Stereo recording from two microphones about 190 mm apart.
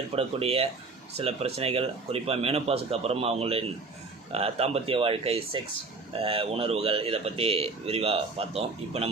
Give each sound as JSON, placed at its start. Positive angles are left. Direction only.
{"t": 0.2, "sound": "speech", "side_deg": -30}